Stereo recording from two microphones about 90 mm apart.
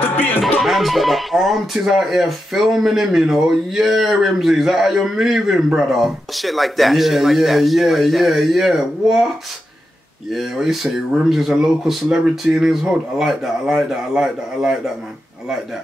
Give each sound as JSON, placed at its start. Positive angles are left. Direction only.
{"t": 0.0, "sound": "music", "side_deg": 20}
{"t": 0.6, "sound": "speech", "side_deg": 0}
{"t": 10.3, "sound": "speech", "side_deg": 0}